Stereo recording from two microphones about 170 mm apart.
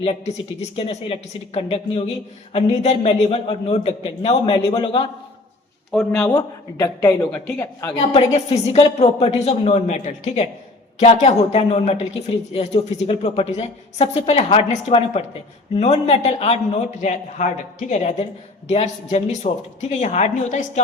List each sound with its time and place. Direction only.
0.0 s a woman's voice: 35° left (ahead or behind)
5.9 s speech: 5° left (ahead or behind)
6.3 s a man's voice: 25° left (ahead or behind)
7.9 s a woman's voice: 40° left (ahead or behind)